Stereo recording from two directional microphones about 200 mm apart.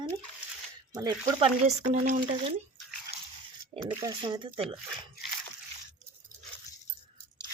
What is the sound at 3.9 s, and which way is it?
Speech, 20° right (ahead or behind).